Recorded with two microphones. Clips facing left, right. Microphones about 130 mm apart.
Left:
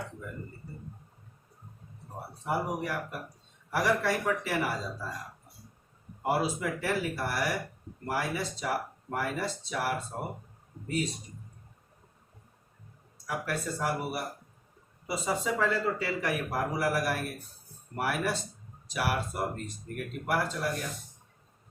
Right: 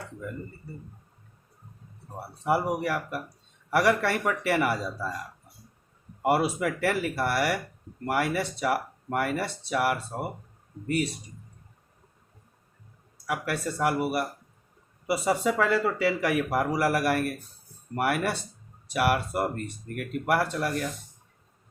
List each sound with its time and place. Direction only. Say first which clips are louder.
2.4 s a man's voice: right 6 dB; 70° right (ahead or behind)
6.2 s a man's voice: right 5 dB; 70° right (ahead or behind)
13.2 s a man's voice: right 4 dB; 70° right (ahead or behind)